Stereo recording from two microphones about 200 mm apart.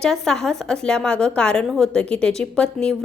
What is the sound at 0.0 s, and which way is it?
A woman's voice, 5° left (ahead or behind).